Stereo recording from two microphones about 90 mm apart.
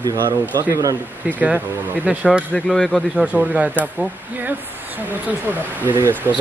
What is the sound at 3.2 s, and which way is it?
Speech, 15° right (ahead or behind).